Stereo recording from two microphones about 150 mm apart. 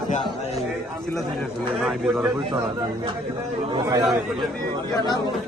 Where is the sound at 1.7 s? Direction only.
5° right (ahead or behind).